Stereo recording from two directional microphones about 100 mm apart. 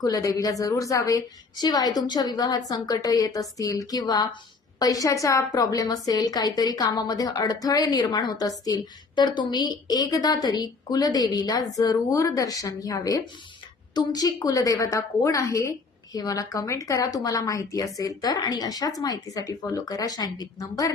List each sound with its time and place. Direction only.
0.0 s a woman's voice: 35° left (ahead or behind)